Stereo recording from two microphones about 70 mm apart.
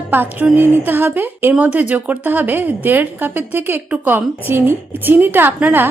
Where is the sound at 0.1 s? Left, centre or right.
Right.